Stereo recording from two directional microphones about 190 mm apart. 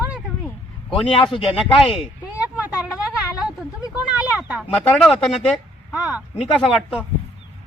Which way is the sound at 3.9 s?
5° right (ahead or behind).